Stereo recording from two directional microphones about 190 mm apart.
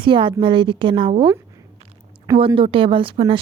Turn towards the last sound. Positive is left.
turn(degrees=-25)  # may be behind; listen again after turning